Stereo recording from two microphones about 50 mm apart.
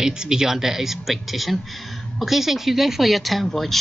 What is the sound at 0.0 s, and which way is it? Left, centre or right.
Speech, centre.